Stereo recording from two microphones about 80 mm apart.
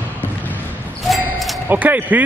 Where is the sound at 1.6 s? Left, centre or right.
Right.